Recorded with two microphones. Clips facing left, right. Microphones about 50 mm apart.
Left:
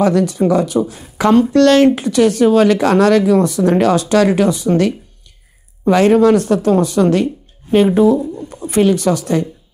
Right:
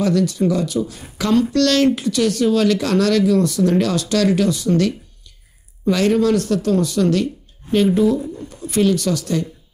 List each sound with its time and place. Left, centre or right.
0.0 s speech: left